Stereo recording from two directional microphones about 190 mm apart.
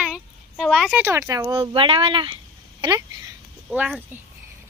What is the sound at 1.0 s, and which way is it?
Speech, 15° right (ahead or behind).